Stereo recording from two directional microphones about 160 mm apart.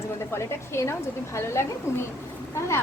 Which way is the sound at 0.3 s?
15° left (ahead or behind).